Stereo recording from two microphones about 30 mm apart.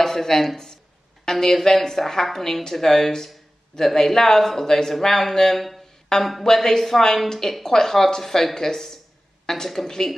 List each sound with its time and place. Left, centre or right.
0.0 s a woman's voice: centre
6.1 s a woman's voice: left